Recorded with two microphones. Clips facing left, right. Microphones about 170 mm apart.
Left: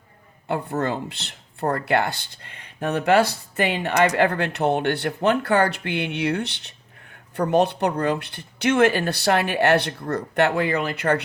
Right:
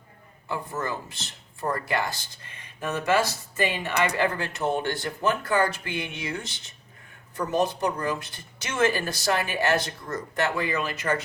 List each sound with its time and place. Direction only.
0.4 s speech: 65° left (ahead or behind)